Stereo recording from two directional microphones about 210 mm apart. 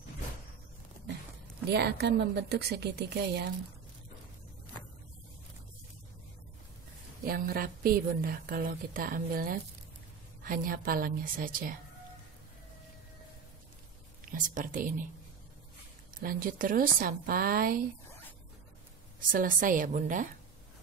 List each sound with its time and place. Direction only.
1.7 s a woman's voice: 50° right (ahead or behind)
7.2 s a woman's voice: 45° right (ahead or behind)
14.2 s a woman's voice: 40° right (ahead or behind)
16.2 s a woman's voice: 40° right (ahead or behind)
19.3 s a woman's voice: 40° right (ahead or behind)